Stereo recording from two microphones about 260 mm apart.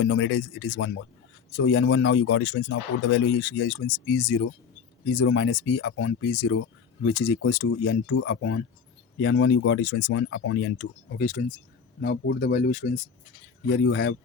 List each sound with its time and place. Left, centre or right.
0.0 s speech: left
13.7 s speech: left